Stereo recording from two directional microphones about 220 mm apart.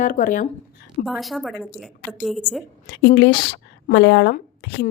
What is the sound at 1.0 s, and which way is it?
A woman's voice, centre (ahead or behind).